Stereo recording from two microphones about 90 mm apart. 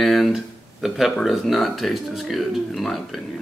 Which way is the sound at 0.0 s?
Centre (ahead or behind).